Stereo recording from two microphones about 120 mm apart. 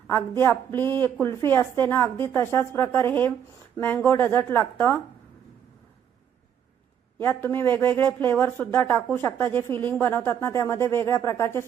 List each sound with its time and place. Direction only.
0.1 s a woman's voice: 20° left (ahead or behind)
7.2 s a woman's voice: 15° left (ahead or behind)